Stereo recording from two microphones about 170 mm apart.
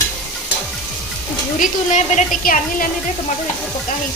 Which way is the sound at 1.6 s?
50° left (ahead or behind).